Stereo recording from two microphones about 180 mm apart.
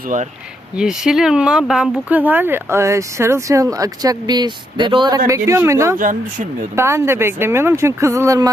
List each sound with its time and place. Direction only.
0.8 s speech: 5° right (ahead or behind)
6.0 s speech: 45° right (ahead or behind)
6.7 s speech: 15° right (ahead or behind)